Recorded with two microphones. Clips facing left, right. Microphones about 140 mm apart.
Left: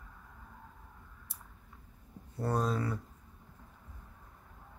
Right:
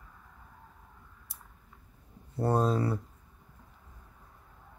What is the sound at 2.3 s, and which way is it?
Speech, 30° right (ahead or behind).